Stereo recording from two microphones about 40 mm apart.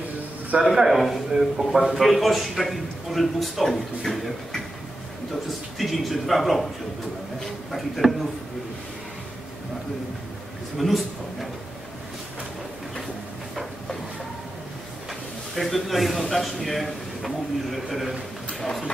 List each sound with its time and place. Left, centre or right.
0.5 s a man's voice: right
0.8 s a man's voice: centre
1.7 s a man's voice: centre
2.0 s a man's voice: centre
5.8 s a man's voice: centre
8.0 s a man's voice: centre
10.8 s a man's voice: centre
15.5 s a man's voice: centre